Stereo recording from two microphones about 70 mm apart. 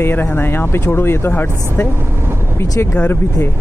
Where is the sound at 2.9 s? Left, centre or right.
Left.